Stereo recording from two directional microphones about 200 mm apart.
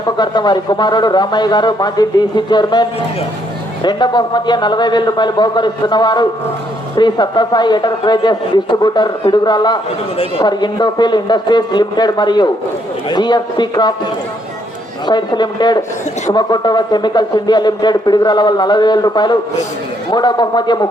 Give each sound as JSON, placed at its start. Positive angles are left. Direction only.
{"t": 0.2, "sound": "a woman's voice", "side_deg": 20}
{"t": 3.8, "sound": "a woman's voice", "side_deg": 20}